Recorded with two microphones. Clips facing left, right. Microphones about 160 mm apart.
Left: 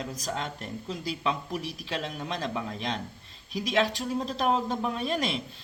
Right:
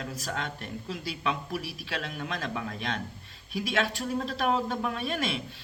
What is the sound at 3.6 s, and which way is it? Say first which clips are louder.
Speech: left 2 dB; 35° left (ahead or behind).